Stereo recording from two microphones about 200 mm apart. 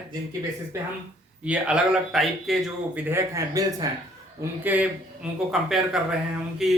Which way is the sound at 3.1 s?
15° right (ahead or behind).